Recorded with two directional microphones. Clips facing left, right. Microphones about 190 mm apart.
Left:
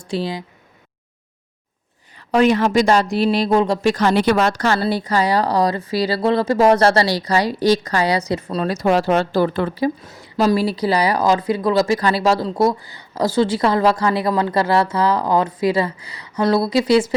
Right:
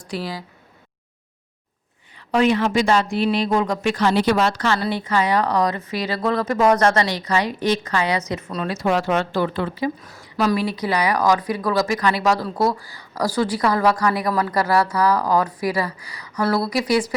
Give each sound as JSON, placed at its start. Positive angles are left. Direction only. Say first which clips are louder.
{"t": 0.0, "sound": "speech", "louder": "left 5 dB", "side_deg": 25}
{"t": 2.1, "sound": "speech", "louder": "left 3 dB", "side_deg": 45}
{"t": 3.9, "sound": "speech", "louder": "right 1 dB", "side_deg": 55}
{"t": 10.1, "sound": "speech", "louder": "left 3 dB", "side_deg": 25}